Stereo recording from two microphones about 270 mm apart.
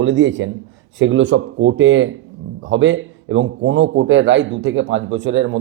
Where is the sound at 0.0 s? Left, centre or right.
Right.